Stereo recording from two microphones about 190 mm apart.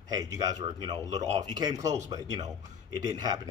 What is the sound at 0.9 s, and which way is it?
Speech, 20° right (ahead or behind).